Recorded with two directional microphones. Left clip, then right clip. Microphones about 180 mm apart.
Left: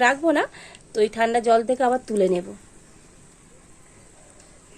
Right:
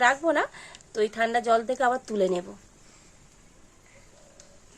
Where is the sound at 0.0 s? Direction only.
25° left (ahead or behind).